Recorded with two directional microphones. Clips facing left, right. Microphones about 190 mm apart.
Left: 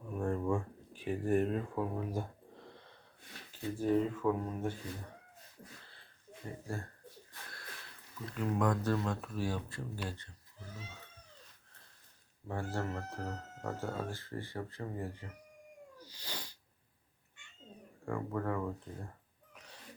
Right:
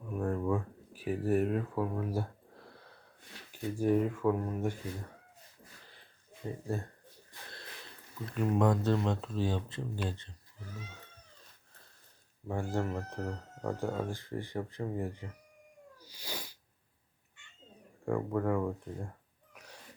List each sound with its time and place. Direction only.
0.2 s a sound: 5° right (ahead or behind)
3.5 s speech: 10° right (ahead or behind)
5.8 s a sound: 15° right (ahead or behind)
6.4 s speech: 20° right (ahead or behind)
8.4 s speech: 25° right (ahead or behind)
12.5 s speech: 15° right (ahead or behind)
16.0 s cat: 10° right (ahead or behind)
18.0 s speech: 15° right (ahead or behind)
19.5 s gasp: 10° right (ahead or behind)